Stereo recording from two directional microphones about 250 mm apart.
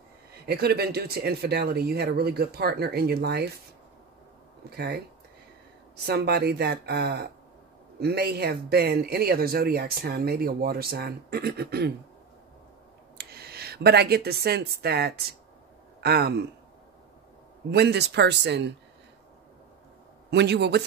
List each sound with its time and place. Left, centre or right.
0.5 s speech: right
4.6 s speech: right
6.0 s speech: right
13.2 s speech: right
17.6 s speech: right
20.2 s speech: right